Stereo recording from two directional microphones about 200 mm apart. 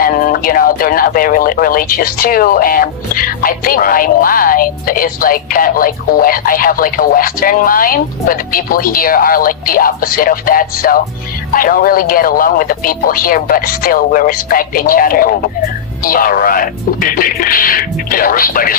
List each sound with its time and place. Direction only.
0.0 s speech: 45° left (ahead or behind)